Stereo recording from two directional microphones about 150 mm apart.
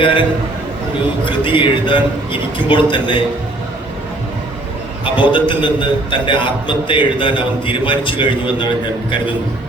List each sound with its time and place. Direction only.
0.0 s a man's voice: 35° left (ahead or behind)
5.0 s a man's voice: 30° left (ahead or behind)